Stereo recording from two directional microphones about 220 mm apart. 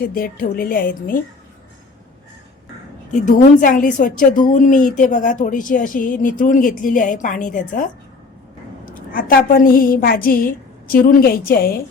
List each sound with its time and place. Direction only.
0.0 s a woman's voice: 40° left (ahead or behind)
3.1 s a woman's voice: 35° left (ahead or behind)